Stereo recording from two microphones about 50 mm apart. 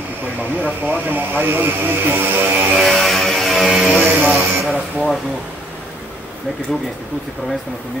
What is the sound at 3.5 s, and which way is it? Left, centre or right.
Speech, centre.